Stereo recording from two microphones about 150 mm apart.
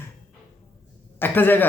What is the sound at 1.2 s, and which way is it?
Speech, 15° left (ahead or behind).